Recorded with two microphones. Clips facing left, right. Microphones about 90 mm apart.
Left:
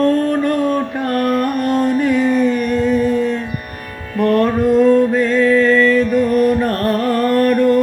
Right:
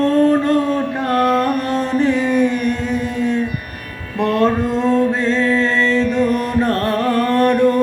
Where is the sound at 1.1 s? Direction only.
25° right (ahead or behind).